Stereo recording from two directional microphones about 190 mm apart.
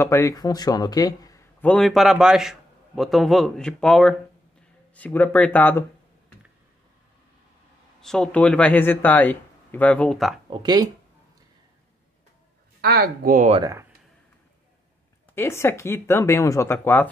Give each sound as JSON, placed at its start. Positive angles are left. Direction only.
{"t": 0.0, "sound": "a man's voice", "side_deg": 15}
{"t": 8.0, "sound": "a man's voice", "side_deg": 5}
{"t": 10.5, "sound": "speech", "side_deg": -25}
{"t": 12.8, "sound": "speech", "side_deg": -55}
{"t": 13.5, "sound": "speech", "side_deg": -20}
{"t": 15.3, "sound": "a man's voice", "side_deg": 10}